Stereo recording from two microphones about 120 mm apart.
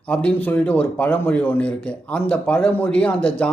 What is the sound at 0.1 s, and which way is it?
A man's voice, 10° left (ahead or behind).